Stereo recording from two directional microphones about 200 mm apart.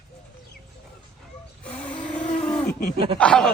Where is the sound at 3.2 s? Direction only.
5° left (ahead or behind).